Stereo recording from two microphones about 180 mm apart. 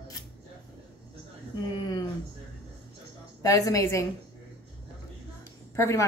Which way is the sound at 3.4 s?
20° left (ahead or behind).